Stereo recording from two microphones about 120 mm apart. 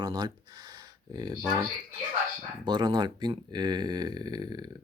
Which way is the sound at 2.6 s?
35° right (ahead or behind).